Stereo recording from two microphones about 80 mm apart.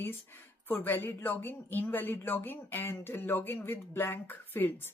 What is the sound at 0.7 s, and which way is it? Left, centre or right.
A woman's voice, left.